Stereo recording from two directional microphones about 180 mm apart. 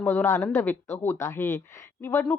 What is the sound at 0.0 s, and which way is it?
Speech, 10° left (ahead or behind).